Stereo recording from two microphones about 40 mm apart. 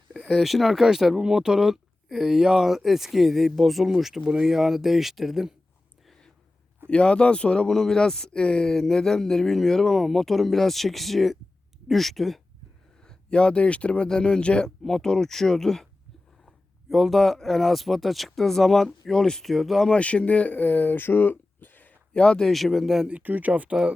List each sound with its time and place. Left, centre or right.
0.3 s speech: centre
6.9 s speech: left
7.7 s speech: centre
13.1 s speech: left
16.9 s speech: centre
19.5 s speech: centre
19.9 s speech: left
20.6 s speech: left
22.1 s speech: left
22.4 s speech: centre
23.2 s speech: right